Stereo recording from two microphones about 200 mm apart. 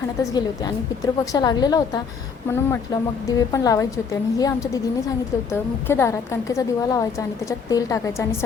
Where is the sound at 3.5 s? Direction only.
15° left (ahead or behind).